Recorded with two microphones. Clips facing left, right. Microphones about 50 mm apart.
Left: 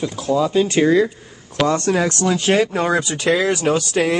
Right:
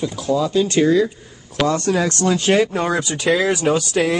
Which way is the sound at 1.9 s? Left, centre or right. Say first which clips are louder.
Even; left.